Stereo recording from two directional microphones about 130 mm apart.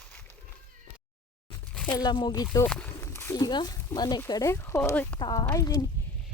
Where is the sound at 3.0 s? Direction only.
20° left (ahead or behind).